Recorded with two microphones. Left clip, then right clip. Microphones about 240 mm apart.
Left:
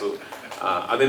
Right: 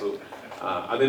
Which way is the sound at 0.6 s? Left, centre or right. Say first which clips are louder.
Left 4 dB; centre.